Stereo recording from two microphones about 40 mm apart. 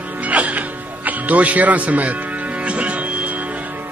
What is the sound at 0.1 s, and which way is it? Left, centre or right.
Music, right.